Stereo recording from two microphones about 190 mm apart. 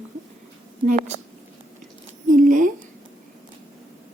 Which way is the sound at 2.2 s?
45° right (ahead or behind).